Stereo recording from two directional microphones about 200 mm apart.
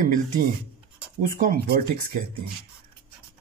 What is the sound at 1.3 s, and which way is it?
Speech, 50° right (ahead or behind).